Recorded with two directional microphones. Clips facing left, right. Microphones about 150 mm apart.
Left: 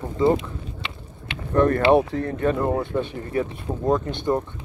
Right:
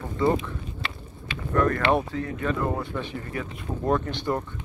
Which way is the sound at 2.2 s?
45° left (ahead or behind).